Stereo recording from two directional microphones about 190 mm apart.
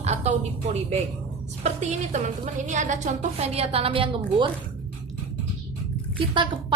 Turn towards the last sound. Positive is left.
turn(degrees=-25)  # may be behind; listen again after turning